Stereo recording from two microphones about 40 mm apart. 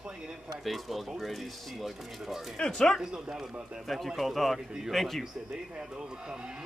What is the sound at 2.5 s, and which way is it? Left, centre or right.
Speech, centre.